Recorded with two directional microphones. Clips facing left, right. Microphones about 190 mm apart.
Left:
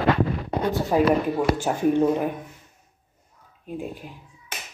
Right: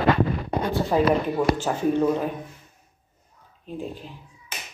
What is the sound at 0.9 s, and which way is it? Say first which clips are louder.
Speech: left 1 dB; 10° left (ahead or behind).